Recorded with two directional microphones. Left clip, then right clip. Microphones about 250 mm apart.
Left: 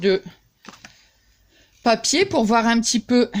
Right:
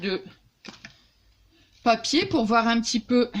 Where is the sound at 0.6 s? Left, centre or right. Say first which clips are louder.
Left 1 dB; centre.